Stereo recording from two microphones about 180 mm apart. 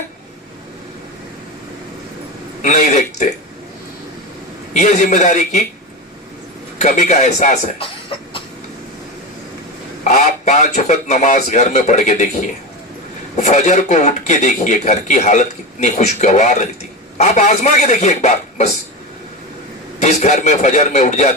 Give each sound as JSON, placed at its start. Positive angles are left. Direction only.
{"t": 2.6, "sound": "a man's voice", "side_deg": 40}
{"t": 4.7, "sound": "speech", "side_deg": 40}
{"t": 6.7, "sound": "speech", "side_deg": 40}
{"t": 10.0, "sound": "speech", "side_deg": 40}
{"t": 20.0, "sound": "speech", "side_deg": 40}